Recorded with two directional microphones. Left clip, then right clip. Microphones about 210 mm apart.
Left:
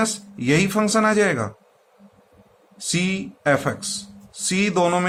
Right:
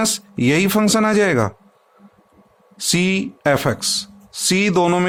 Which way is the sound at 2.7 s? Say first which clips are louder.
Right 6 dB; 50° right (ahead or behind).